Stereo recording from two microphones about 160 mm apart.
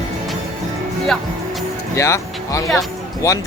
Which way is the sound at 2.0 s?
20° left (ahead or behind).